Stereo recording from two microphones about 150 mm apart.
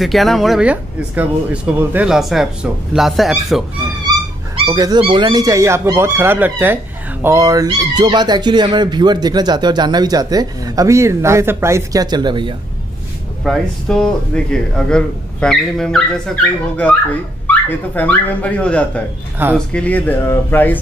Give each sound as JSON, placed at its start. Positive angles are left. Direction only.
{"t": 0.0, "sound": "speech", "side_deg": 0}
{"t": 4.6, "sound": "speech", "side_deg": -25}
{"t": 13.4, "sound": "speech", "side_deg": 5}
{"t": 19.4, "sound": "speech", "side_deg": -15}
{"t": 19.7, "sound": "speech", "side_deg": 10}